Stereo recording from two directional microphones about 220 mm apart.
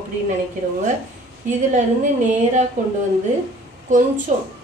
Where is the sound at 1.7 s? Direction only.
35° right (ahead or behind).